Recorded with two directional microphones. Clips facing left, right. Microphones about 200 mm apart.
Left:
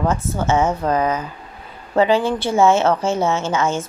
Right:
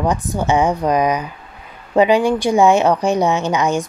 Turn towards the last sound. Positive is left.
turn(degrees=-15)  # may be behind; listen again after turning